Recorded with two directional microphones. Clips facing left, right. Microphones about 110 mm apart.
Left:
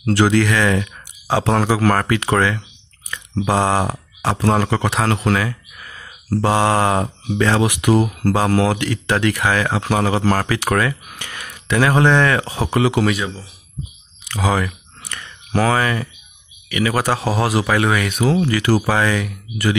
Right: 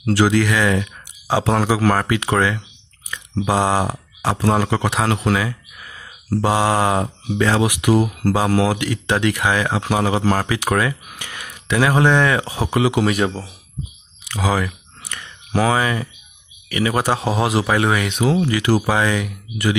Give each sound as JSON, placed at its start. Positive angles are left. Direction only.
{"t": 0.0, "sound": "speech", "side_deg": -5}
{"t": 13.1, "sound": "speech", "side_deg": -55}
{"t": 14.2, "sound": "a sound", "side_deg": -5}
{"t": 16.8, "sound": "speech", "side_deg": -25}